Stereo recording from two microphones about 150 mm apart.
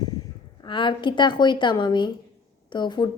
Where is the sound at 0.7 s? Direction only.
35° left (ahead or behind).